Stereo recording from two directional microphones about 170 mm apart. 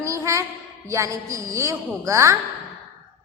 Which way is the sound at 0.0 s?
15° right (ahead or behind).